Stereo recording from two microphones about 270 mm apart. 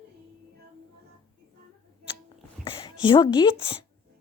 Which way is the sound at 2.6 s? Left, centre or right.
Centre.